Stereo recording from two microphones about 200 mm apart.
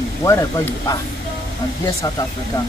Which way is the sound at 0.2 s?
15° left (ahead or behind).